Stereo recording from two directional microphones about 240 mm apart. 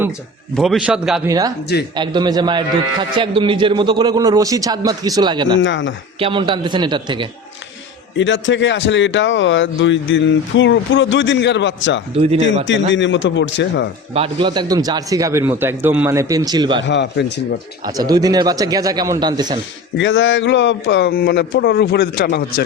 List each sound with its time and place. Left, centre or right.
0.5 s a man's voice: centre
1.3 s a man's voice: centre
5.5 s speech: left
6.1 s a man's voice: right
8.2 s speech: left
12.1 s a man's voice: right
12.9 s speech: left
14.1 s a man's voice: right
16.8 s speech: left
17.8 s a man's voice: centre
20.0 s speech: left